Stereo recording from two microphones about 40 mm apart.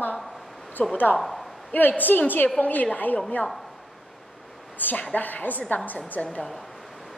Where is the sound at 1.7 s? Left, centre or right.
Left.